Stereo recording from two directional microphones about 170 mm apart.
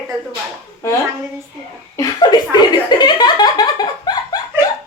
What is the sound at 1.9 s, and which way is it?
Speech, 25° left (ahead or behind).